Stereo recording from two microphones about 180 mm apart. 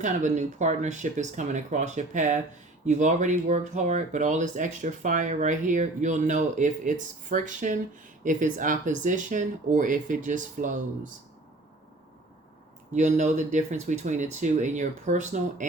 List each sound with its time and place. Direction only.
0.0 s speech: 40° right (ahead or behind)
12.9 s speech: 40° right (ahead or behind)